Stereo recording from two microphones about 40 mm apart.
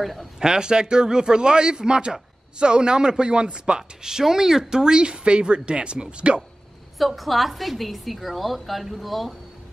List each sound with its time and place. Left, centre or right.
0.0 s a woman's voice: centre
0.4 s speech: centre
7.0 s a woman's voice: centre